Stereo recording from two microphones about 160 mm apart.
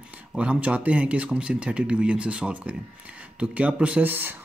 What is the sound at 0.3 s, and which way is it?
Speech, 5° right (ahead or behind).